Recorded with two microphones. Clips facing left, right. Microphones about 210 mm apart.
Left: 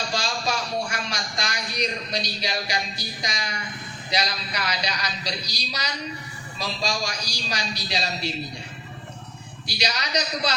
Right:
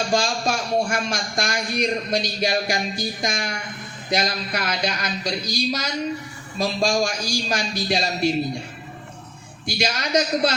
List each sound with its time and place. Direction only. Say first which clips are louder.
0.1 s speech: right 5 dB; 50° right (ahead or behind)
9.6 s speech: right 5 dB; 50° right (ahead or behind)